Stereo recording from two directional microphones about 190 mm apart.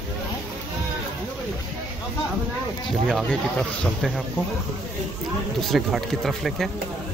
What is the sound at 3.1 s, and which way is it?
Speech, 5° left (ahead or behind).